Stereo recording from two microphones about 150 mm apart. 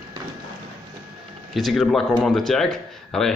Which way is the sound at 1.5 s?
Centre (ahead or behind).